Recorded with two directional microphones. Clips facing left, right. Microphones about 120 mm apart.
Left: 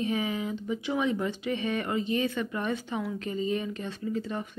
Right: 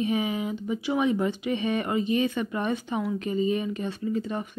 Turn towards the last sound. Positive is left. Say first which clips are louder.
# right 3 dB
turn(degrees=-15)  # may be behind; listen again after turning